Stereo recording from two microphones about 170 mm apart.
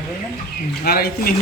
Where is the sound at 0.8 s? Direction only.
65° left (ahead or behind).